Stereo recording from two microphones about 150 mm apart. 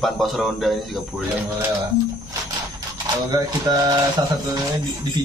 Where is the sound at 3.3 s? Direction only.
25° right (ahead or behind).